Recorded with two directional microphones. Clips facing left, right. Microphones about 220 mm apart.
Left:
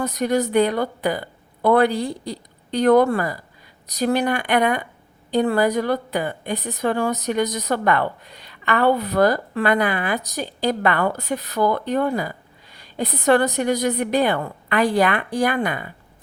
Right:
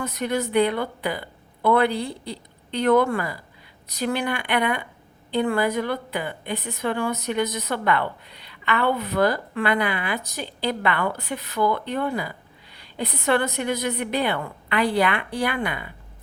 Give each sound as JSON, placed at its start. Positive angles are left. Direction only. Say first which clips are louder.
{"t": 0.0, "sound": "a woman's voice", "louder": "left 5 dB", "side_deg": 40}